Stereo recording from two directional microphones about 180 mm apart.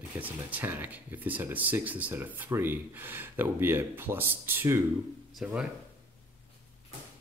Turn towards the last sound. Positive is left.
turn(degrees=-5)  # may be behind; listen again after turning